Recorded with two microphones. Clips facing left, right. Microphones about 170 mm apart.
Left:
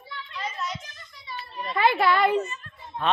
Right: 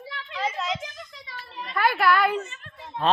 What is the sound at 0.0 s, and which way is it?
Children playing, 90° right.